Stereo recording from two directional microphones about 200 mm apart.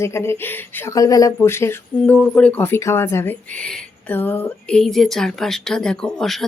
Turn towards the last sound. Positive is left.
turn(degrees=0)  # may be behind; listen again after turning